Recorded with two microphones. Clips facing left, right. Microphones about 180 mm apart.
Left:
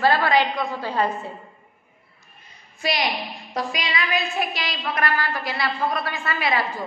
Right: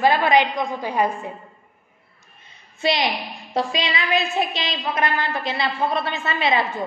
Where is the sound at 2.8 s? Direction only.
25° right (ahead or behind).